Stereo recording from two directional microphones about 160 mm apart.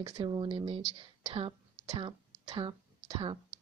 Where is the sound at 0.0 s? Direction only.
30° right (ahead or behind).